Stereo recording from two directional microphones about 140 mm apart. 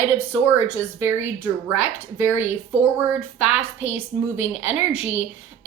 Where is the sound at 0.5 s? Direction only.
15° right (ahead or behind).